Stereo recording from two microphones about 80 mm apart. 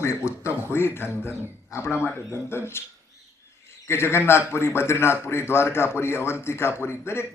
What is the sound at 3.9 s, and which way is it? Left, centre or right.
A man's voice, left.